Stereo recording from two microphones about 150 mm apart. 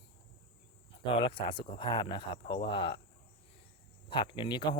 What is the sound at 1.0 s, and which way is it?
Speech, 35° left (ahead or behind).